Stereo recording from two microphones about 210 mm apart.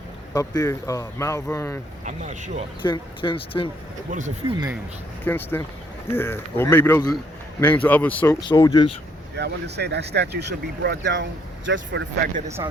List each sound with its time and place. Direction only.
0.3 s speech: 20° left (ahead or behind)
2.0 s speech: 35° right (ahead or behind)
2.8 s speech: 25° left (ahead or behind)
4.1 s speech: 35° right (ahead or behind)
5.2 s speech: 10° left (ahead or behind)
9.3 s speech: 55° right (ahead or behind)